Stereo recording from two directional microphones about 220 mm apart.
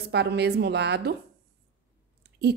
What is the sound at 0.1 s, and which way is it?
A woman's voice, 50° right (ahead or behind).